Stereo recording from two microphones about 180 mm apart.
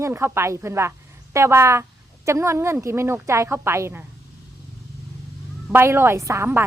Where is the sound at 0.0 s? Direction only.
15° right (ahead or behind).